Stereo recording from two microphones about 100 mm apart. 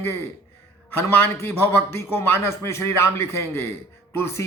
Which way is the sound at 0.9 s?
20° left (ahead or behind).